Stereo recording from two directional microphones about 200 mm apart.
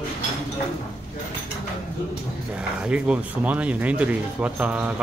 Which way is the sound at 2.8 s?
5° right (ahead or behind).